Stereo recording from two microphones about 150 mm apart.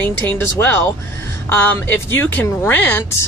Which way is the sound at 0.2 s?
15° left (ahead or behind).